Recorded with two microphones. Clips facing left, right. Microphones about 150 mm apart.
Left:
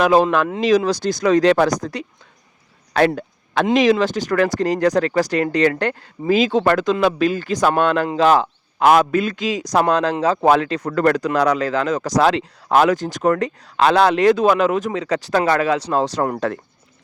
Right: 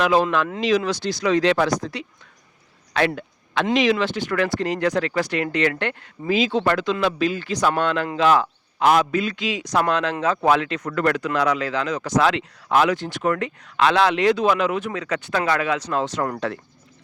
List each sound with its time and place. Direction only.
0.0 s speech: 45° left (ahead or behind)
3.2 s a sound: 40° left (ahead or behind)
3.8 s speech: 40° left (ahead or behind)
8.8 s speech: 50° left (ahead or behind)
16.4 s speech: 45° left (ahead or behind)